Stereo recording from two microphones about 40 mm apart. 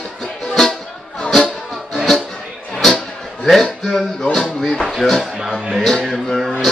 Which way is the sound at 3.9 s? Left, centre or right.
Centre.